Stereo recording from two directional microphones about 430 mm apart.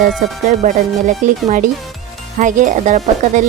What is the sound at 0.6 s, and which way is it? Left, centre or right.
Speech, centre.